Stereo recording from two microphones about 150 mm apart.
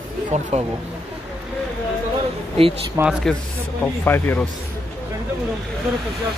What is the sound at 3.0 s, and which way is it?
Speech, 20° right (ahead or behind).